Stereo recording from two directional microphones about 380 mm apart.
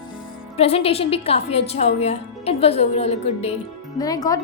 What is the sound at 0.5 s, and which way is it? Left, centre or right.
A woman's voice, centre.